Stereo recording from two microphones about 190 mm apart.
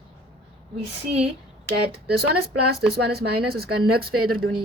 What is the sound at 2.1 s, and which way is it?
A woman's voice, 55° right (ahead or behind).